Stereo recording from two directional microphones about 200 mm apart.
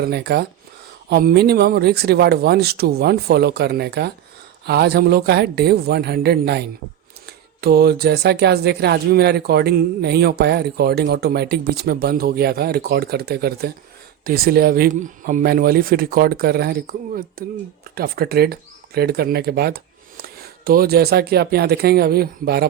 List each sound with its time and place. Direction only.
0.0 s speech: 55° right (ahead or behind)